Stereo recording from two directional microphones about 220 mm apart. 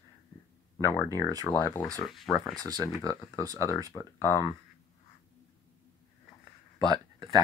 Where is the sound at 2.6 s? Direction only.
15° right (ahead or behind).